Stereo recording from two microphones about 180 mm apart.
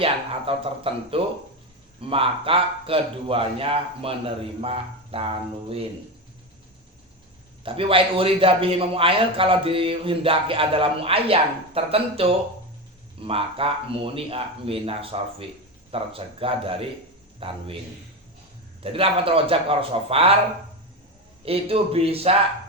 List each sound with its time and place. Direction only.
0.0 s a man's voice: 30° right (ahead or behind)
7.6 s a man's voice: 30° right (ahead or behind)
18.8 s a man's voice: 30° right (ahead or behind)
21.4 s a man's voice: 30° right (ahead or behind)